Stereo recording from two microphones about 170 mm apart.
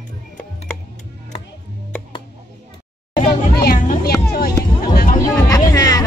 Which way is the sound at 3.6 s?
55° left (ahead or behind).